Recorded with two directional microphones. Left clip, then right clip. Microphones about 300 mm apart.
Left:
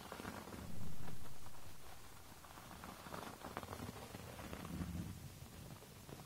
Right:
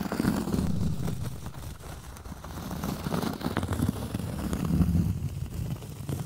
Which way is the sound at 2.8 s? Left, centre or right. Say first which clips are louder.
Right 18 dB; right.